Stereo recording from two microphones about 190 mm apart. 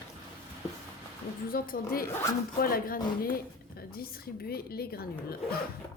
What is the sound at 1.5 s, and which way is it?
A woman's voice, 50° left (ahead or behind).